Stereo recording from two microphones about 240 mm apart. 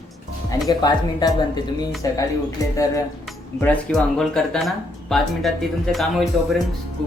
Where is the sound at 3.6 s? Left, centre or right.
Centre.